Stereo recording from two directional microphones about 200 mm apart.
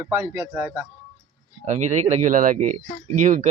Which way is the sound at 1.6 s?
35° right (ahead or behind).